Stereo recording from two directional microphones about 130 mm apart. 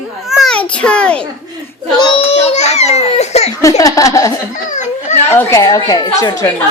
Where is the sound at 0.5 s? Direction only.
10° left (ahead or behind).